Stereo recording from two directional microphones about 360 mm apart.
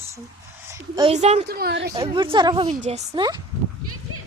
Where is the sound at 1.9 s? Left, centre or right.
Centre.